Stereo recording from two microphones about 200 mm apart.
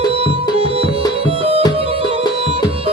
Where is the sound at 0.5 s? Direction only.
30° right (ahead or behind).